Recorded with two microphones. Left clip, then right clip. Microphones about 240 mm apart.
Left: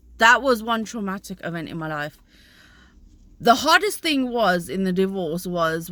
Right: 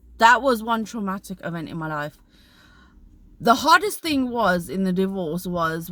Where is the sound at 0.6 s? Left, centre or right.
Right.